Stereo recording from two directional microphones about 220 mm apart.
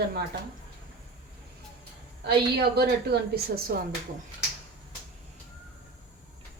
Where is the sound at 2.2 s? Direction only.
45° right (ahead or behind).